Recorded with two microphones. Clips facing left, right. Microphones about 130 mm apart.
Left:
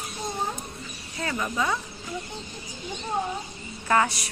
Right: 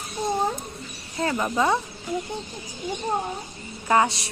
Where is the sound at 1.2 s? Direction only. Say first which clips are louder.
Right 5 dB; 25° right (ahead or behind).